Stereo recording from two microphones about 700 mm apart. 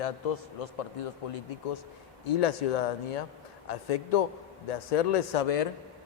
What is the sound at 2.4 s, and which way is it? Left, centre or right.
A man's voice, left.